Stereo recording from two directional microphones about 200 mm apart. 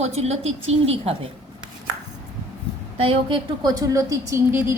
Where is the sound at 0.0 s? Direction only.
35° right (ahead or behind).